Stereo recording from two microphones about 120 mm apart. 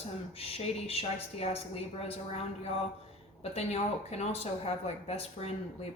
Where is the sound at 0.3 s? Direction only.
55° left (ahead or behind).